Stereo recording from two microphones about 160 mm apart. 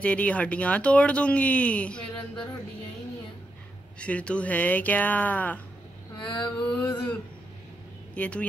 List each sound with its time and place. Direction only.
0.0 s speech: 10° left (ahead or behind)
4.0 s speech: 5° left (ahead or behind)
6.2 s a sound: 30° left (ahead or behind)
8.1 s speech: 10° left (ahead or behind)